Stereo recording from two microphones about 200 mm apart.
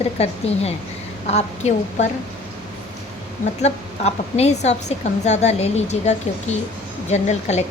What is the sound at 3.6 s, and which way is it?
A woman's voice, 35° left (ahead or behind).